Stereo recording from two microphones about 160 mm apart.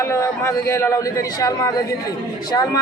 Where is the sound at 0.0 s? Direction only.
15° left (ahead or behind).